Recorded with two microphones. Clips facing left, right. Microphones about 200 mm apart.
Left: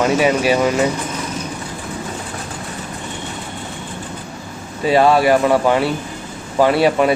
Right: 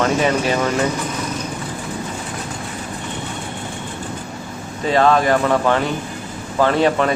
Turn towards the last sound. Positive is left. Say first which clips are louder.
# left 2 dB
turn(degrees=10)  # may be behind; listen again after turning